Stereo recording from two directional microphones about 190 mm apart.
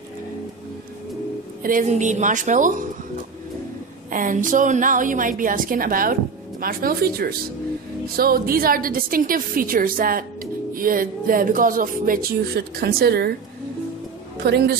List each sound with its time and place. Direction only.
1.6 s a woman's voice: 45° right (ahead or behind)
4.1 s a woman's voice: 45° right (ahead or behind)
14.4 s a woman's voice: 55° right (ahead or behind)